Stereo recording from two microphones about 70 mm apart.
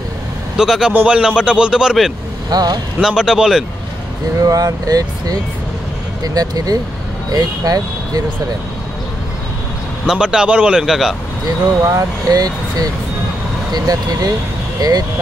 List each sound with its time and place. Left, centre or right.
0.6 s a man's voice: centre
2.5 s speech: right
3.0 s a man's voice: centre
4.4 s speech: right
10.0 s a man's voice: centre
11.9 s speech: right
13.7 s speech: right